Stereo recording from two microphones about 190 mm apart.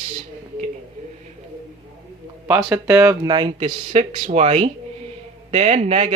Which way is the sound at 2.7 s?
15° right (ahead or behind).